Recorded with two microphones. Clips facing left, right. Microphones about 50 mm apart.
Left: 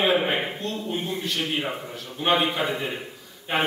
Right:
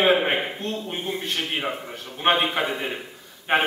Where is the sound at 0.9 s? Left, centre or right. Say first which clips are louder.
Even; right.